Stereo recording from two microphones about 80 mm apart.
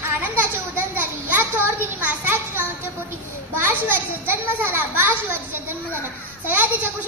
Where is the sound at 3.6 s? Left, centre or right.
Right.